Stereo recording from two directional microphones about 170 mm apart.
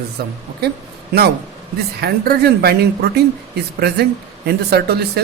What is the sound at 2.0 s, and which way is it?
A woman's voice, 65° right (ahead or behind).